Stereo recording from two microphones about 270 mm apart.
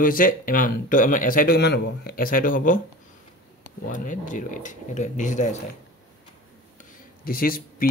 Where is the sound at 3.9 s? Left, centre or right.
Left.